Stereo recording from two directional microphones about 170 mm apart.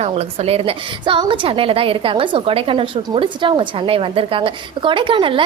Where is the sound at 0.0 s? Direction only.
35° right (ahead or behind).